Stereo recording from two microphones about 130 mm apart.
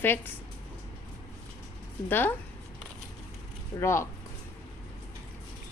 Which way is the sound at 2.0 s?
15° left (ahead or behind).